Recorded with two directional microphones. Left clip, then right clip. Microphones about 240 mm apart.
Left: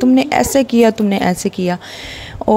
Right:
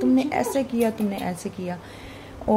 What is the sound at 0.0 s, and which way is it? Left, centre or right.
Speech, left.